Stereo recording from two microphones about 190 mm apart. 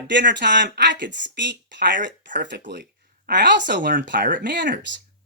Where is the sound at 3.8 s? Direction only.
45° right (ahead or behind).